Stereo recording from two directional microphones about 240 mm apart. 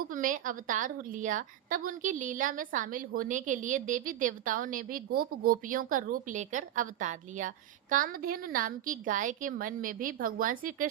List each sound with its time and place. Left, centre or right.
0.0 s a woman's voice: right